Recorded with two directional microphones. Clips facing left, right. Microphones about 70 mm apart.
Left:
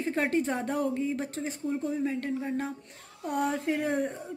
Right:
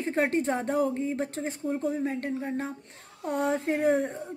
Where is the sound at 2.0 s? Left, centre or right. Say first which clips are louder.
Even; right.